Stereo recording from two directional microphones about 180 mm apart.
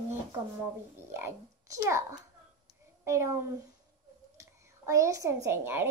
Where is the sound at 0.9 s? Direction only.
15° right (ahead or behind).